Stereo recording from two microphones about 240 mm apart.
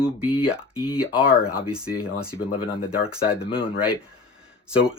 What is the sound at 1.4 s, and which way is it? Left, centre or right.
Speech, centre.